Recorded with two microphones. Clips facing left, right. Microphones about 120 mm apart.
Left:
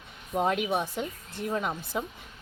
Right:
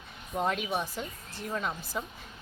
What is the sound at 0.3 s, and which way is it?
Speech, 15° left (ahead or behind).